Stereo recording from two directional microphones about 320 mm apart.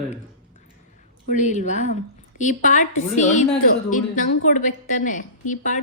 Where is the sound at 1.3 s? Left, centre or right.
Left.